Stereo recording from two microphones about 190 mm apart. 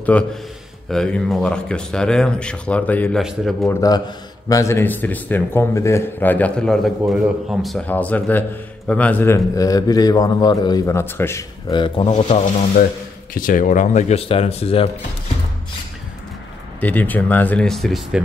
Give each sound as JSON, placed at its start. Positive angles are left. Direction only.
{"t": 0.1, "sound": "a man's voice", "side_deg": 5}
{"t": 3.6, "sound": "a man's voice", "side_deg": 20}
{"t": 11.7, "sound": "speech", "side_deg": 25}
{"t": 12.1, "sound": "speech", "side_deg": 40}
{"t": 16.8, "sound": "a man's voice", "side_deg": 10}